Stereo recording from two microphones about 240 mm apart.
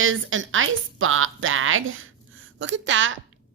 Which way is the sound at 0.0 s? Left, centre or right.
Right.